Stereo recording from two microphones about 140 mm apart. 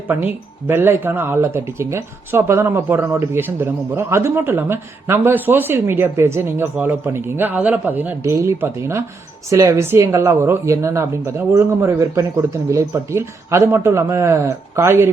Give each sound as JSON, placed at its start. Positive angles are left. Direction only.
{"t": 0.1, "sound": "speech", "side_deg": -15}